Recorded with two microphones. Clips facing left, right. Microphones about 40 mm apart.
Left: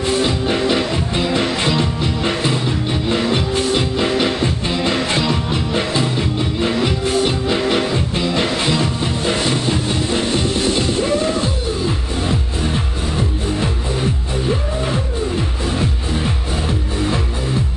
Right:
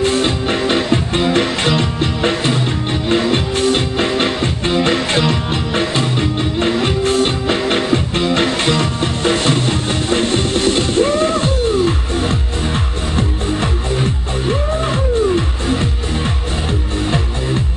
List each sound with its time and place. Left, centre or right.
0.0 s music: right
5.9 s music: right